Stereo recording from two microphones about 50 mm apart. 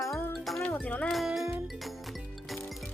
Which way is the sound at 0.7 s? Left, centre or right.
Left.